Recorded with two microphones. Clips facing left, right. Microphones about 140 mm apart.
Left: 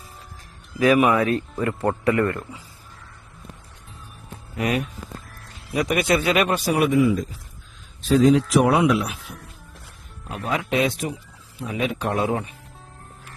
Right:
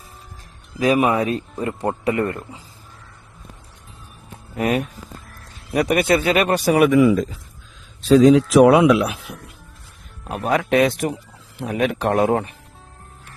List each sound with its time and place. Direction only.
0.8 s a man's voice: 25° right (ahead or behind)
4.5 s speech: 35° right (ahead or behind)
5.9 s speech: 45° right (ahead or behind)
6.7 s a man's voice: 65° right (ahead or behind)
8.0 s a man's voice: 90° right; by 9.4 s 75° right (ahead or behind)
10.2 s speech: 55° right (ahead or behind)